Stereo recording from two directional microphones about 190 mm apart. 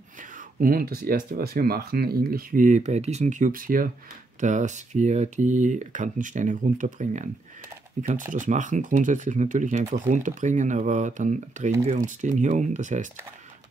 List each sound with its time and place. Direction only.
0.6 s speech: 50° right (ahead or behind)